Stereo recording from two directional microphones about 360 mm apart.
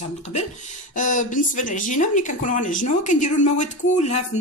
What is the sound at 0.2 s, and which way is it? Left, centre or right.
Speech, centre.